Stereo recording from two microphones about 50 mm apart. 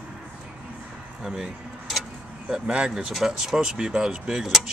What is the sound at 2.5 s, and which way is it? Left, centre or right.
Speech, centre.